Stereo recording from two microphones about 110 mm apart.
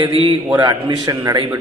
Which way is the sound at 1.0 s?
35° right (ahead or behind).